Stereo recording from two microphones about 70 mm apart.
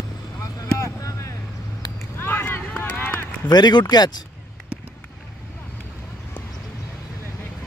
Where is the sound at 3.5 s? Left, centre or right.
Left.